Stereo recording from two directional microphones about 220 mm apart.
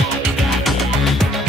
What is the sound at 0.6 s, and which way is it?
Music, centre (ahead or behind).